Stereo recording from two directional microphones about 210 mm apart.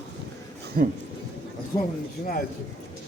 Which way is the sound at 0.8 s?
45° right (ahead or behind).